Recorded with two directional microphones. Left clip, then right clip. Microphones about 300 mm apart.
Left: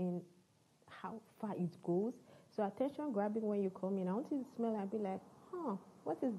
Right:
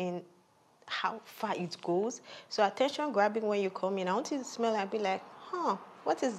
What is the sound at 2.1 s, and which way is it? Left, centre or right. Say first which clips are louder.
A woman's voice: right 11 dB; centre.